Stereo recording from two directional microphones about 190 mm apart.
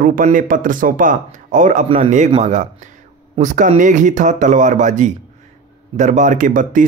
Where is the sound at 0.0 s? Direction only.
45° right (ahead or behind).